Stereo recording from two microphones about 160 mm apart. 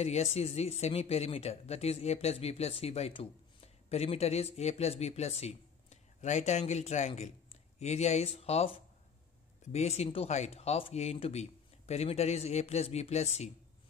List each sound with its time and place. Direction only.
0.0 s speech: 40° left (ahead or behind)